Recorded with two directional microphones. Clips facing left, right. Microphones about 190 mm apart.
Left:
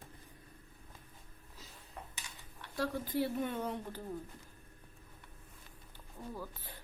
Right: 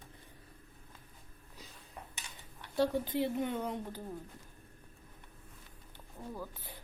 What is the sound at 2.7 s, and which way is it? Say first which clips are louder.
Speech: right 4 dB; 25° right (ahead or behind).